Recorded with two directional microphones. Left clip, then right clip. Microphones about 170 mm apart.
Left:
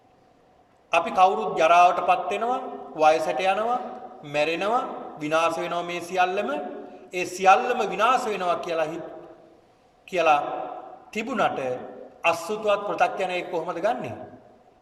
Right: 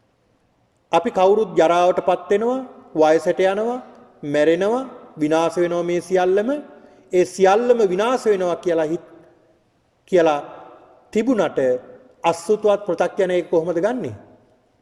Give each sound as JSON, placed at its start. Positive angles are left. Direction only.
{"t": 0.9, "sound": "a man's voice", "side_deg": -45}
{"t": 10.1, "sound": "a man's voice", "side_deg": -45}